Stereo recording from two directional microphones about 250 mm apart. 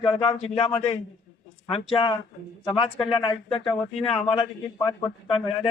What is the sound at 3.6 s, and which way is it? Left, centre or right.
Speech, centre.